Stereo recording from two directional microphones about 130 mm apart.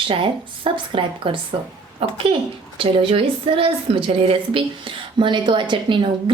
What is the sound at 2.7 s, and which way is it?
Speech, 45° right (ahead or behind).